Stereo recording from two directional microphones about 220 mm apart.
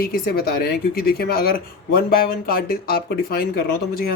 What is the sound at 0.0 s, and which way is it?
Speech, 45° left (ahead or behind).